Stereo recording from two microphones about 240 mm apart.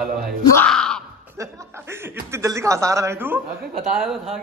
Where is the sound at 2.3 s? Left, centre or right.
Centre.